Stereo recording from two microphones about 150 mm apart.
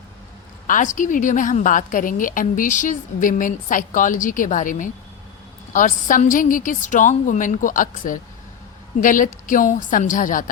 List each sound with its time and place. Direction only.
0.7 s a woman's voice: 60° left (ahead or behind)